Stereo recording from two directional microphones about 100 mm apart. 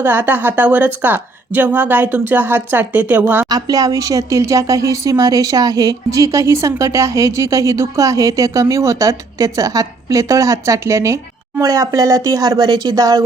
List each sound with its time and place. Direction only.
0.0 s a woman's voice: 20° right (ahead or behind)
3.5 s a woman's voice: 40° right (ahead or behind)